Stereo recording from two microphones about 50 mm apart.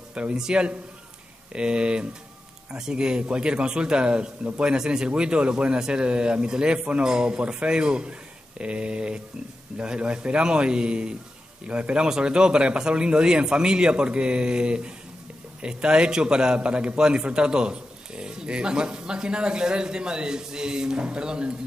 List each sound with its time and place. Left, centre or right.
0.1 s a man's voice: centre